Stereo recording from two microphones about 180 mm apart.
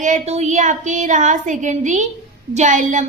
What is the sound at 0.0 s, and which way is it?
A woman's voice, 40° right (ahead or behind).